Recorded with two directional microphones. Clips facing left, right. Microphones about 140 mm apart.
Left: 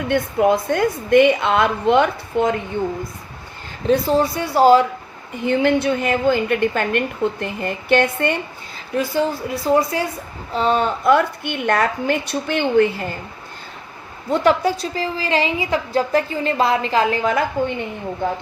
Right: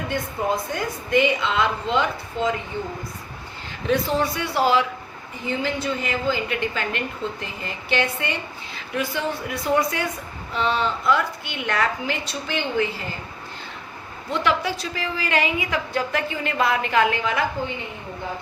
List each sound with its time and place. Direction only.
0.1 s a woman's voice: 65° left (ahead or behind)
3.8 s a woman's voice: 35° left (ahead or behind)
5.5 s a woman's voice: 60° left (ahead or behind)
9.0 s a woman's voice: 35° left (ahead or behind); by 13.1 s 55° left (ahead or behind)
14.3 s a woman's voice: 40° left (ahead or behind)